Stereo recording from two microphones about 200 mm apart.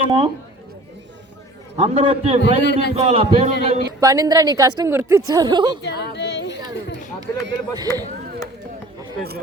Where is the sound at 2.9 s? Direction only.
30° right (ahead or behind).